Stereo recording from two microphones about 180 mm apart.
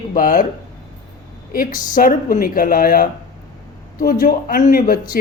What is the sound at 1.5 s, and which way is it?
Speech, 50° left (ahead or behind).